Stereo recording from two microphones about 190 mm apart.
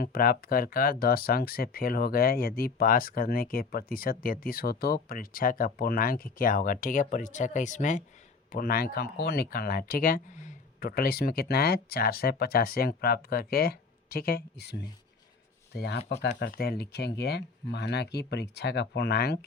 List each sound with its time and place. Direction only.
0.0 s speech: 50° left (ahead or behind)